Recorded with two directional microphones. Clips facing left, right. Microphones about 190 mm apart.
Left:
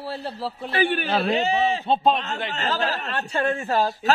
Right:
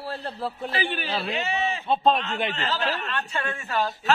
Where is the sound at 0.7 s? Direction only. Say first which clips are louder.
Left 9 dB; 50° left (ahead or behind).